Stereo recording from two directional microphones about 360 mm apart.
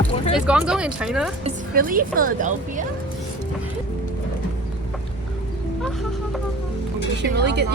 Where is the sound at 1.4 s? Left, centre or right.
Right.